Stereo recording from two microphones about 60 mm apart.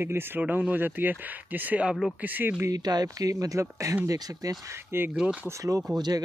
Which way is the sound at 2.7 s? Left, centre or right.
Right.